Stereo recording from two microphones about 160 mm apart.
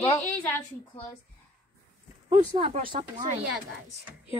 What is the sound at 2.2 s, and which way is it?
Speech, 35° right (ahead or behind).